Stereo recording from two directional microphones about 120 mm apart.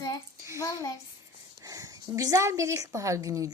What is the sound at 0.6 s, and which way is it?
Speech, 30° left (ahead or behind).